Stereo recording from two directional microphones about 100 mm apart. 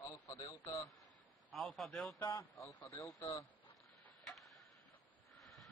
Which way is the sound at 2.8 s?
30° left (ahead or behind).